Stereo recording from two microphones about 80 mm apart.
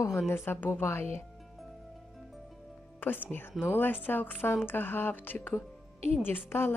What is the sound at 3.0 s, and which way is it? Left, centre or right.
A woman's voice, left.